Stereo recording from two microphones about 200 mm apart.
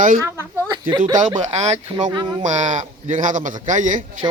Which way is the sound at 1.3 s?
35° right (ahead or behind).